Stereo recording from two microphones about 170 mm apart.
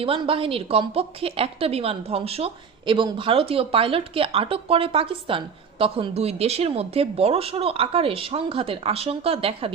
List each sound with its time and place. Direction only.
0.0 s a woman's voice: 35° right (ahead or behind)